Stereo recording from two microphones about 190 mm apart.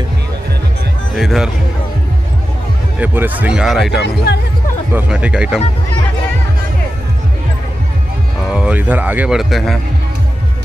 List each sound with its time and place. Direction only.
1.1 s music: centre (ahead or behind)
3.0 s speech: 10° right (ahead or behind)
4.0 s speech: 60° left (ahead or behind)
4.9 s speech: 5° right (ahead or behind)
8.5 s speech: 5° right (ahead or behind)